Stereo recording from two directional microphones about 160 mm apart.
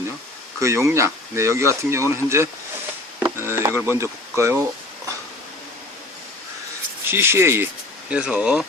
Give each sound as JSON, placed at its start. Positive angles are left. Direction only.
{"t": 0.6, "sound": "speech", "side_deg": -20}
{"t": 3.2, "sound": "chop", "side_deg": -15}
{"t": 3.8, "sound": "speech", "side_deg": -15}
{"t": 7.1, "sound": "speech", "side_deg": -15}